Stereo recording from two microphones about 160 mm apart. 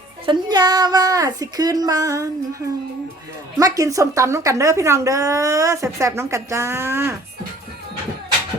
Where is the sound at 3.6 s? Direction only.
20° right (ahead or behind).